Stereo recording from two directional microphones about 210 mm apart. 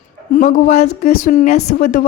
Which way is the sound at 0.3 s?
40° left (ahead or behind).